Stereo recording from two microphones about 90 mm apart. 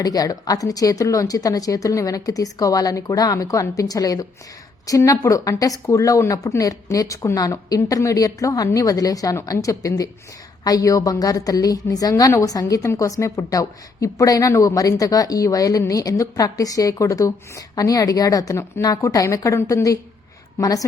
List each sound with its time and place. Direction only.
0.0 s speech: 45° left (ahead or behind)